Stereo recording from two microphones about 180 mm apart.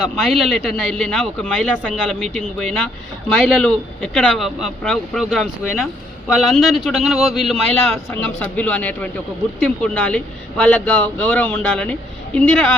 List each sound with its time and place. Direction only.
0.0 s speech: centre (ahead or behind)